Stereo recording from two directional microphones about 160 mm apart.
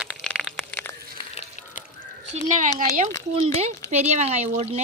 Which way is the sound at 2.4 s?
50° right (ahead or behind).